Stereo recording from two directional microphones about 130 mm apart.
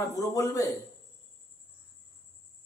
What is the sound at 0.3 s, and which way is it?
Speech, 25° left (ahead or behind).